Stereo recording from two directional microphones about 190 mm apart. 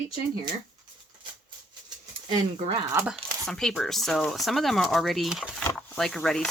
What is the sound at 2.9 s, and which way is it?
Speech, 5° right (ahead or behind).